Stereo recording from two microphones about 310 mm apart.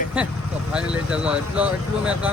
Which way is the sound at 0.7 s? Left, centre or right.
Centre.